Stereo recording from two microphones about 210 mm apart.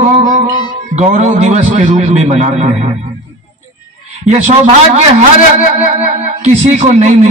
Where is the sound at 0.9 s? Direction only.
30° right (ahead or behind).